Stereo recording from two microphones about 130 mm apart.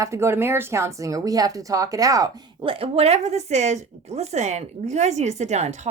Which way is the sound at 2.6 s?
50° right (ahead or behind).